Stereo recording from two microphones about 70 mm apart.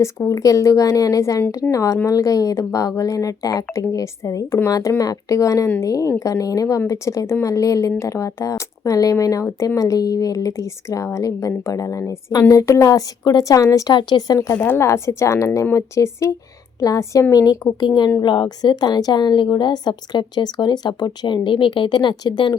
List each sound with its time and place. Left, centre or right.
0.3 s a woman's voice: left
13.9 s speech: left
14.3 s speech: left
14.6 s speech: left
14.8 s a woman's voice: left
17.3 s speech: left
17.7 s a woman's voice: left